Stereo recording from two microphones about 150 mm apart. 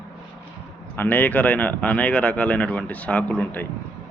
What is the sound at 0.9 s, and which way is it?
Speech, 10° left (ahead or behind).